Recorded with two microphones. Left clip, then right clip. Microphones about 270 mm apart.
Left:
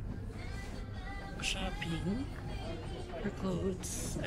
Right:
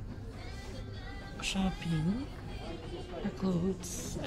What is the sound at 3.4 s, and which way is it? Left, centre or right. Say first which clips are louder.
Speech: right 3 dB; centre.